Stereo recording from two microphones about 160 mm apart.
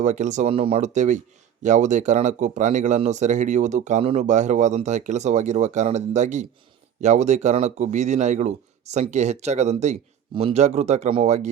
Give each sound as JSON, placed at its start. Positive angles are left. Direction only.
{"t": 0.0, "sound": "speech", "side_deg": -50}